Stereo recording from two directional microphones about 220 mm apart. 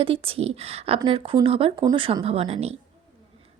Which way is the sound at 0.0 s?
25° right (ahead or behind).